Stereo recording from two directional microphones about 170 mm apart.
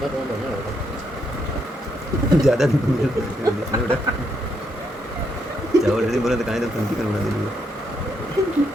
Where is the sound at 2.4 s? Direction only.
Centre (ahead or behind).